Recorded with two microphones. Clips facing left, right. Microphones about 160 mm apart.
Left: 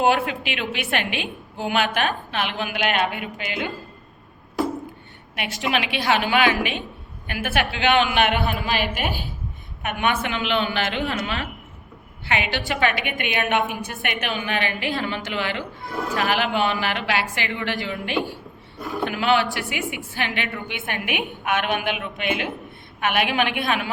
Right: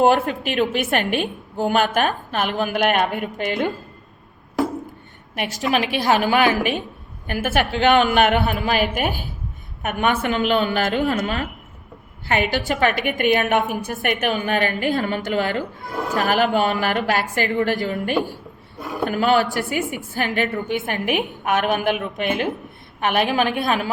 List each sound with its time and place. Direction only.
0.0 s a woman's voice: 45° right (ahead or behind)
5.4 s a woman's voice: 40° right (ahead or behind)